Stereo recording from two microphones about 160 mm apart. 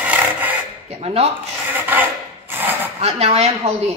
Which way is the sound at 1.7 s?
10° right (ahead or behind).